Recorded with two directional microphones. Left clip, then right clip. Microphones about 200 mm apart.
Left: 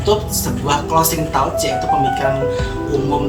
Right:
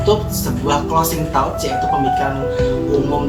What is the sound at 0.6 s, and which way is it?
Speech, 25° left (ahead or behind).